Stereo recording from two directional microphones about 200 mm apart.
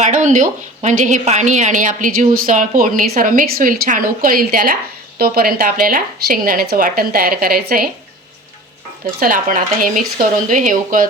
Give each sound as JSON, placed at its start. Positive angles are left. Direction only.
{"t": 0.0, "sound": "a woman's voice", "side_deg": -40}
{"t": 9.2, "sound": "a woman's voice", "side_deg": -45}